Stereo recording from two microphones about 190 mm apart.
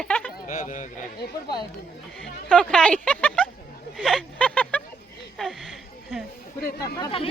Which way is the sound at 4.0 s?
5° left (ahead or behind).